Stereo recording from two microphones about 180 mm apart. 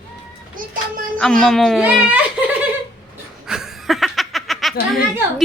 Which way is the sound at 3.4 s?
5° right (ahead or behind).